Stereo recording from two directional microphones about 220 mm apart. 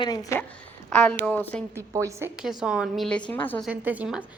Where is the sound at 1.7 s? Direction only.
15° right (ahead or behind); by 3.7 s 10° left (ahead or behind).